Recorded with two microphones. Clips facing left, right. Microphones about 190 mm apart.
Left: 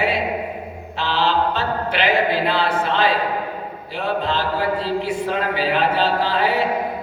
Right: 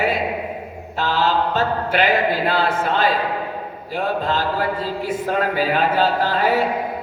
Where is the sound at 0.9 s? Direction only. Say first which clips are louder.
Right 1 dB; 45° right (ahead or behind).